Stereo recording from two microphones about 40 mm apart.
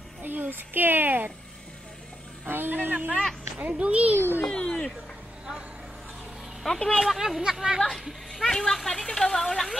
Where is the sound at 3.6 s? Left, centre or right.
Right.